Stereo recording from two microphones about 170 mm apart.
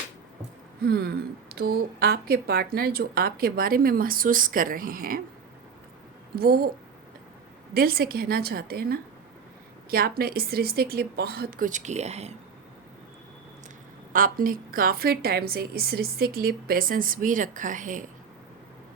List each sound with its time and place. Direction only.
0.9 s a woman's voice: 70° right (ahead or behind); by 5.2 s 55° right (ahead or behind)
6.3 s a woman's voice: 65° right (ahead or behind)
7.7 s a woman's voice: 60° right (ahead or behind); by 12.3 s 40° right (ahead or behind)
14.1 s a woman's voice: 55° right (ahead or behind)